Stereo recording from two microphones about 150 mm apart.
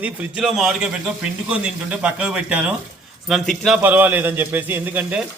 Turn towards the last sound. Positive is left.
turn(degrees=-15)  # may be behind; listen again after turning